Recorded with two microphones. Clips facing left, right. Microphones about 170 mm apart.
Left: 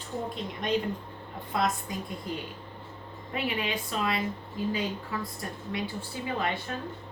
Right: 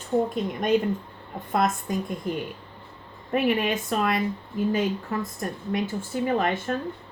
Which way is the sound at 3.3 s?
50° right (ahead or behind).